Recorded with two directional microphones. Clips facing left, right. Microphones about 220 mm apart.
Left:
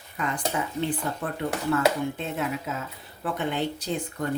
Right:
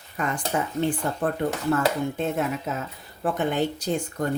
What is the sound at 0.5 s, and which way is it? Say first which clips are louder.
Speech: right 3 dB; 50° right (ahead or behind).